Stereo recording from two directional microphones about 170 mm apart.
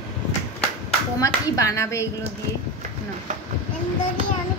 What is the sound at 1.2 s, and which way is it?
Speech, 20° left (ahead or behind).